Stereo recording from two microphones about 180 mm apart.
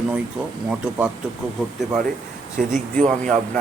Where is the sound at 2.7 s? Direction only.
45° right (ahead or behind).